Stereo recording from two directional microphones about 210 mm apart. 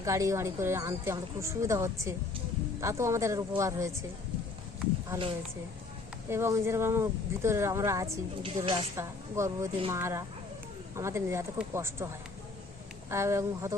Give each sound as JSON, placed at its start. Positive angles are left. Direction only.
{"t": 0.0, "sound": "a woman's voice", "side_deg": -15}
{"t": 5.0, "sound": "a woman's voice", "side_deg": -20}
{"t": 8.4, "sound": "a woman's voice", "side_deg": -25}
{"t": 9.0, "sound": "a woman's voice", "side_deg": -15}
{"t": 13.1, "sound": "a woman's voice", "side_deg": -15}